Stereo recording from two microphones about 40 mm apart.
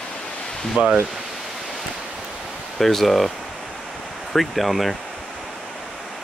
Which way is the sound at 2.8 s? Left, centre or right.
Centre.